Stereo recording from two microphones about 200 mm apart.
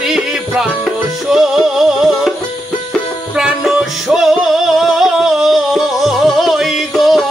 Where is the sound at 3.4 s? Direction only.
5° right (ahead or behind).